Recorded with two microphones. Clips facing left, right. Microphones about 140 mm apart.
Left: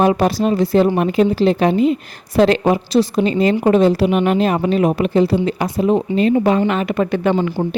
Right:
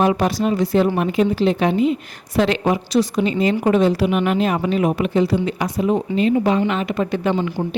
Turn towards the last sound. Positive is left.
turn(degrees=55)  # may be behind; listen again after turning